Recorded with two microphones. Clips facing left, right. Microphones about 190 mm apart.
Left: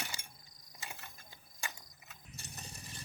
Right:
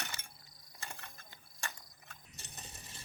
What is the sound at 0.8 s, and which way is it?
Mechanisms, 5° left (ahead or behind).